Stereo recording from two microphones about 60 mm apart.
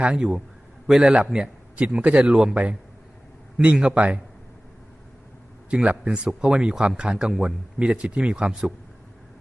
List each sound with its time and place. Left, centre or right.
0.0 s a man's voice: centre
5.7 s a man's voice: centre